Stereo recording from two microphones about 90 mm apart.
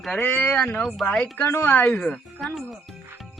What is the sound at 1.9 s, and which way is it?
Speech, 5° left (ahead or behind).